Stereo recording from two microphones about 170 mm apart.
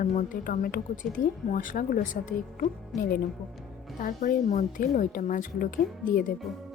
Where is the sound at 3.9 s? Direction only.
60° left (ahead or behind).